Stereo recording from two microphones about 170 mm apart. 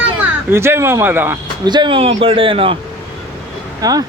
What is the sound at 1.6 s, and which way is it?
A man's voice, 25° right (ahead or behind).